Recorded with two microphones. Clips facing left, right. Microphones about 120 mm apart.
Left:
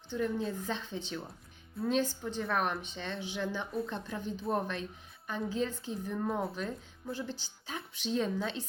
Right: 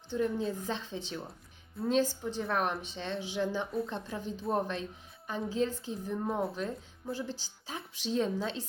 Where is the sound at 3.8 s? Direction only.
25° right (ahead or behind).